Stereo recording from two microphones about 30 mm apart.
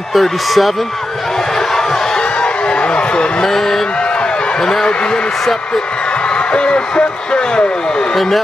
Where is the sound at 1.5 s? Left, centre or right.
Centre.